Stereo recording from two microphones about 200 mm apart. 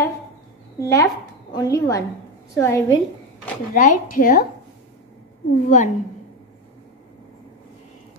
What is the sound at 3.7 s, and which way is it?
Speech, 40° left (ahead or behind).